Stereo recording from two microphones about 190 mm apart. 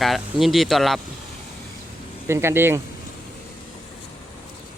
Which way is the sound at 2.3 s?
15° right (ahead or behind).